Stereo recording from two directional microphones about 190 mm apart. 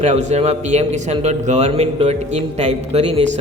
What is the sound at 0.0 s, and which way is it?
A man's voice, 35° right (ahead or behind).